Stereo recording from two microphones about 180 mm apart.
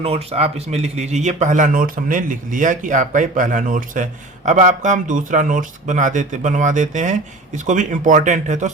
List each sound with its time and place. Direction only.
0.0 s speech: 35° right (ahead or behind)